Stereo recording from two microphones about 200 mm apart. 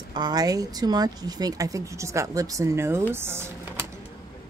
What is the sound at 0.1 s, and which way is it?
Speech, 20° right (ahead or behind).